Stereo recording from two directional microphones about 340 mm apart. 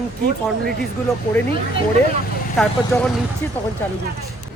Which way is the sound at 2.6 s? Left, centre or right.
Centre.